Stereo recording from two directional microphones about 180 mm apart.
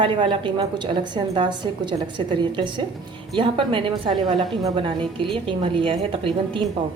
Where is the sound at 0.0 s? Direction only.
30° right (ahead or behind).